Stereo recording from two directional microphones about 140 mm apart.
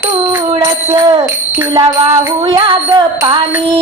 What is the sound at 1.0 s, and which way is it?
Music, 30° right (ahead or behind).